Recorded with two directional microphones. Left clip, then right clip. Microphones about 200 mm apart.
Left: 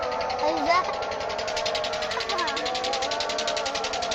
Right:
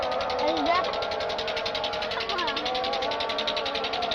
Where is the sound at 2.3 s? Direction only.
50° right (ahead or behind).